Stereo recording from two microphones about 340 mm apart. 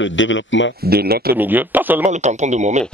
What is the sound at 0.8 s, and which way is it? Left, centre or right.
Speech, right.